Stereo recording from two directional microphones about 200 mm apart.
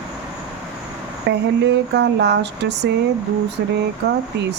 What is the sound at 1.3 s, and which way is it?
Speech, 60° right (ahead or behind).